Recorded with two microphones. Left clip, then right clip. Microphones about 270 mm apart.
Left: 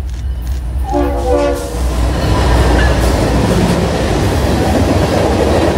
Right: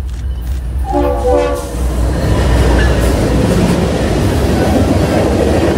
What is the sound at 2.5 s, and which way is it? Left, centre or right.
Train, left.